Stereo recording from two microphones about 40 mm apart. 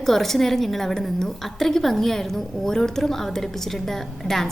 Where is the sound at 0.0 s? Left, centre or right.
Centre.